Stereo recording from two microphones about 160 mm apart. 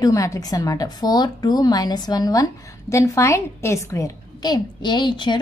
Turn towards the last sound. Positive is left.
turn(degrees=30)  # may be behind; listen again after turning